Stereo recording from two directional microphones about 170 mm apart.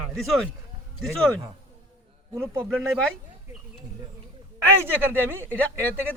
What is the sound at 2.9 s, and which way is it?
Speech, 5° left (ahead or behind).